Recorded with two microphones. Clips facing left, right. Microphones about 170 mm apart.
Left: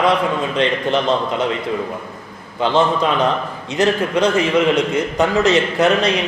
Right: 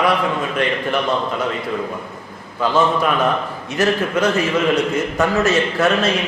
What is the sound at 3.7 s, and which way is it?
A man's voice, 20° left (ahead or behind).